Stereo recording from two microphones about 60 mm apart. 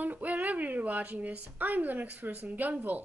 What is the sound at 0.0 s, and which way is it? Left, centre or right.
A woman's voice, right.